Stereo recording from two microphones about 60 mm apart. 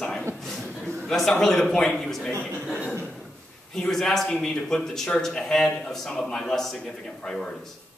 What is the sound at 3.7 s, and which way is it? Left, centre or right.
A man's voice, centre.